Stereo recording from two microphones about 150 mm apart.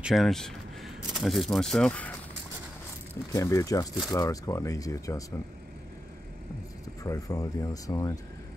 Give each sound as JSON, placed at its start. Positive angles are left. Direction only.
{"t": 0.0, "sound": "speech", "side_deg": 0}
{"t": 3.3, "sound": "speech", "side_deg": 20}
{"t": 7.0, "sound": "speech", "side_deg": 20}